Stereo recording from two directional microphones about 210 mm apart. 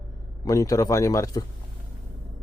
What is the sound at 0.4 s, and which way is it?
Speech, 15° left (ahead or behind).